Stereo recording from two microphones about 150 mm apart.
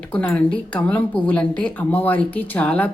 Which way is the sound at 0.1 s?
10° left (ahead or behind).